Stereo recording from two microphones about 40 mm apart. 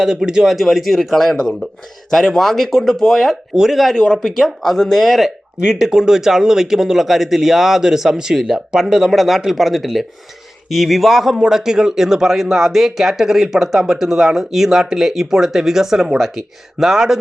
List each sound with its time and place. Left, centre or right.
0.0 s speech: centre
0.5 s a man's voice: centre
3.5 s speech: centre
3.8 s a man's voice: centre
5.5 s a man's voice: centre